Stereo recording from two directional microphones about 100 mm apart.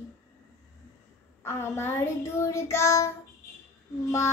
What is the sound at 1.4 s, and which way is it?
Child singing, 25° left (ahead or behind).